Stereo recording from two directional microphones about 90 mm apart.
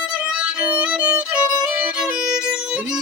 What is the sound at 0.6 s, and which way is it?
Violin, 20° right (ahead or behind).